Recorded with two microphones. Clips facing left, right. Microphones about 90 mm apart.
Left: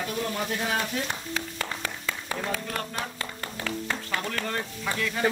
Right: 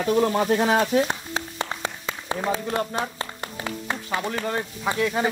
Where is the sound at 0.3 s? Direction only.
60° right (ahead or behind).